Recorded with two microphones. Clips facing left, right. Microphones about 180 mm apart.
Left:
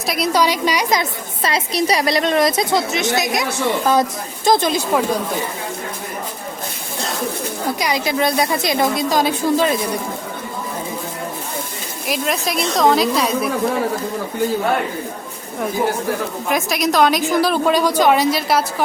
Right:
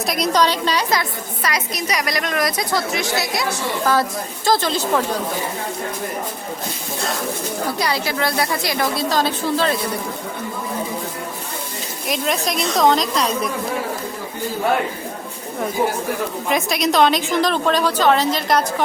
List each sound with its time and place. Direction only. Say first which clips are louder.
0.0 s a woman's voice: left 1 dB; centre (ahead or behind); by 3.4 s 20° left (ahead or behind)
4.4 s a woman's voice: left 3 dB; 15° left (ahead or behind)
7.8 s a woman's voice: left 4 dB; 15° left (ahead or behind)
12.0 s a woman's voice: even; centre (ahead or behind)
16.5 s a woman's voice: left 1 dB; centre (ahead or behind)